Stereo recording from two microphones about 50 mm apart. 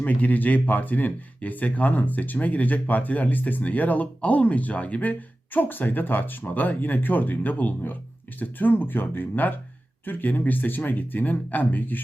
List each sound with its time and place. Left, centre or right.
0.0 s speech: left
5.5 s speech: left